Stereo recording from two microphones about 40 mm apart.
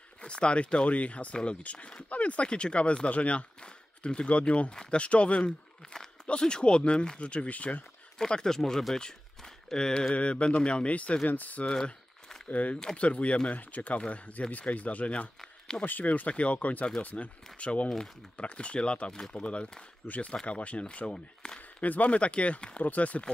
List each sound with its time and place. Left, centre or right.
0.2 s speech: left
8.3 s speech: centre
10.1 s speech: left
21.8 s speech: left